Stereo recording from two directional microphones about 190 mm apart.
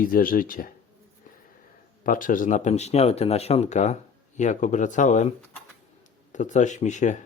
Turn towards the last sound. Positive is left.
turn(degrees=40)  # may be behind; listen again after turning